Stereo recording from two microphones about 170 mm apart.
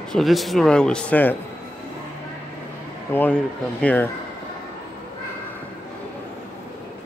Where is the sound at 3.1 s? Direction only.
10° left (ahead or behind).